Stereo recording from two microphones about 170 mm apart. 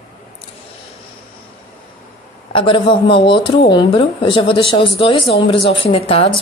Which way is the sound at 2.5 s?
30° left (ahead or behind).